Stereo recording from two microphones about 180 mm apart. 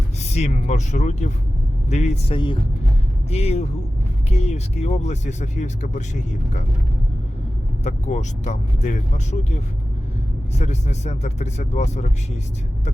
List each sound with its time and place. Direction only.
0.2 s speech: 40° left (ahead or behind)
7.9 s speech: 40° left (ahead or behind)
10.6 s speech: 40° left (ahead or behind)